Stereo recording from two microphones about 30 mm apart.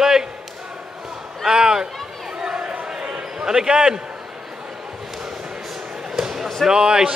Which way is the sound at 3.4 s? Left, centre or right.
Right.